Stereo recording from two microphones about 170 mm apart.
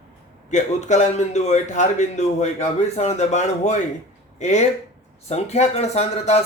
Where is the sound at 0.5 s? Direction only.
45° left (ahead or behind).